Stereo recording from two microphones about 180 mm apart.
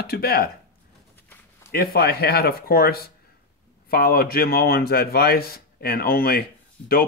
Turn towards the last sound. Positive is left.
turn(degrees=5)  # may be behind; listen again after turning